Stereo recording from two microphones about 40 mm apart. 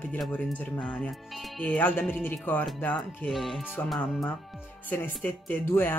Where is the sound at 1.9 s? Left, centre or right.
Left.